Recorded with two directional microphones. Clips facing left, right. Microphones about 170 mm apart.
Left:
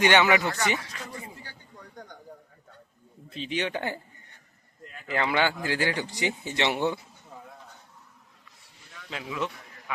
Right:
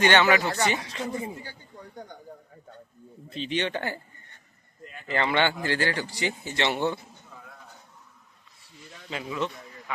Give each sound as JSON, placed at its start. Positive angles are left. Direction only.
{"t": 0.0, "sound": "speech", "side_deg": 15}
{"t": 0.4, "sound": "speech", "side_deg": -20}
{"t": 3.2, "sound": "speech", "side_deg": 0}
{"t": 4.8, "sound": "speech", "side_deg": 0}
{"t": 9.0, "sound": "a man's voice", "side_deg": 0}